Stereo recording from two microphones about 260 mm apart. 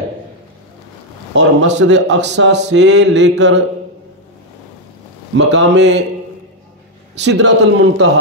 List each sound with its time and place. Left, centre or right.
1.3 s a man's voice: right
5.3 s a man's voice: right
7.2 s a man's voice: right